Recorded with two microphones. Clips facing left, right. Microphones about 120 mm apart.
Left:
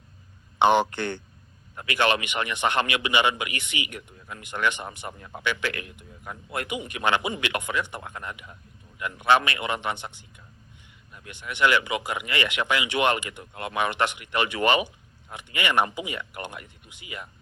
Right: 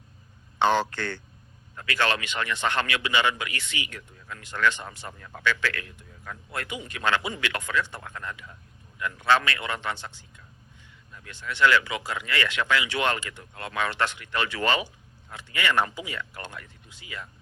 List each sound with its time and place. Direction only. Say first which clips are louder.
0.6 s a man's voice: left 3 dB; 15° left (ahead or behind)